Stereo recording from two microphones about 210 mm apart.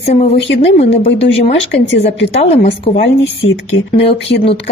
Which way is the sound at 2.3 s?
30° left (ahead or behind).